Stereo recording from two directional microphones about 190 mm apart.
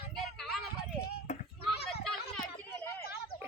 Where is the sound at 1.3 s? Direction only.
40° left (ahead or behind).